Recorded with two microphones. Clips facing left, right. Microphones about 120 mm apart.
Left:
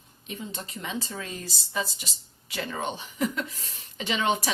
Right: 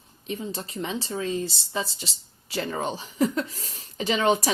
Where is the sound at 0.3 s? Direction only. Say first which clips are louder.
Right 5 dB; 35° right (ahead or behind).